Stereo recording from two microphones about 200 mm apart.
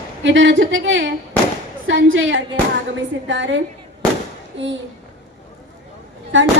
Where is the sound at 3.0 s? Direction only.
65° right (ahead or behind).